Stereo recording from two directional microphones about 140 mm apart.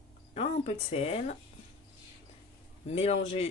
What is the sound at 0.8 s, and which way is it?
Speech, 45° left (ahead or behind).